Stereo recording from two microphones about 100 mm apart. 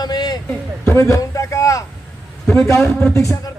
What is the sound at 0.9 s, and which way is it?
Speech, 30° left (ahead or behind).